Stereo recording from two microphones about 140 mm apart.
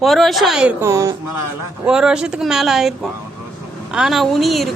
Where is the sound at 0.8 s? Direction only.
20° right (ahead or behind).